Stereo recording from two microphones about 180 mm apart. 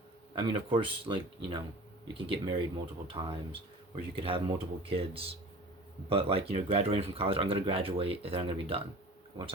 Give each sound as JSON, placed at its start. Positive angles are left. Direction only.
{"t": 0.3, "sound": "speech", "side_deg": -25}